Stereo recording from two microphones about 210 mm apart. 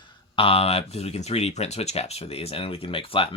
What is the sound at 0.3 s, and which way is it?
Speech, 25° left (ahead or behind).